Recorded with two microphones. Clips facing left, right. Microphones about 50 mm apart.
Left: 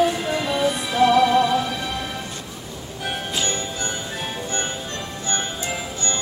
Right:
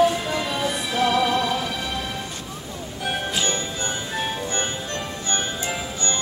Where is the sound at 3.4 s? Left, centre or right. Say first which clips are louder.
Even; right.